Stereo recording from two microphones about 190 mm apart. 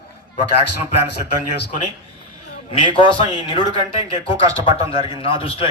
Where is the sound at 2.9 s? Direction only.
25° left (ahead or behind).